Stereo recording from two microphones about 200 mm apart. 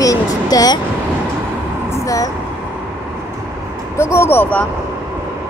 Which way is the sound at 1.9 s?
15° left (ahead or behind).